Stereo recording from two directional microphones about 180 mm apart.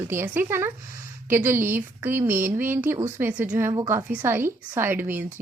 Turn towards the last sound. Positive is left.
turn(degrees=-10)  # may be behind; listen again after turning